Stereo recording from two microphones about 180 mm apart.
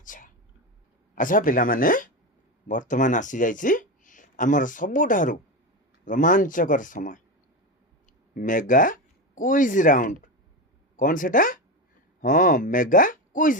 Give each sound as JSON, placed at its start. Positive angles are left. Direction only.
{"t": 0.0, "sound": "a sound", "side_deg": 45}
{"t": 1.1, "sound": "speech", "side_deg": 50}
{"t": 8.4, "sound": "speech", "side_deg": 45}